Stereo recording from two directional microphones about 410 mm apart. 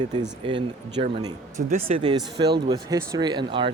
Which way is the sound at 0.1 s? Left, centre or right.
Centre.